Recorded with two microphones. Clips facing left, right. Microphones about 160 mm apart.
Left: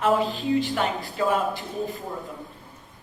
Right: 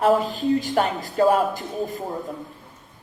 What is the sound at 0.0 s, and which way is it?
A man's voice, 40° right (ahead or behind).